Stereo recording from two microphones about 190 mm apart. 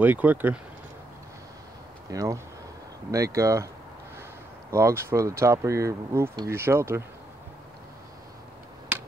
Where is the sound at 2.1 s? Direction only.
15° right (ahead or behind).